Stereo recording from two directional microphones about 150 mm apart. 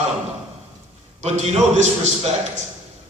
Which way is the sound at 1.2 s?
50° right (ahead or behind).